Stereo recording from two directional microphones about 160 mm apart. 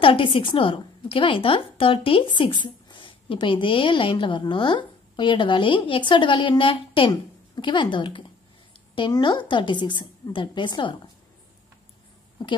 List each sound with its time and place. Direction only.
0.0 s a woman's voice: 35° left (ahead or behind)